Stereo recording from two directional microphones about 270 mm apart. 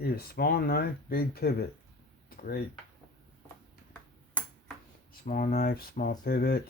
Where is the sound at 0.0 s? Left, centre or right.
Left.